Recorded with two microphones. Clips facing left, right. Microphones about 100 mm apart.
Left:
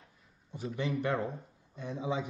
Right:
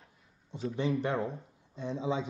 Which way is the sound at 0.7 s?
25° right (ahead or behind).